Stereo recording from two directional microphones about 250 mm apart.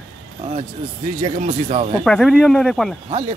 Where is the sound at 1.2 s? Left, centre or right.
Right.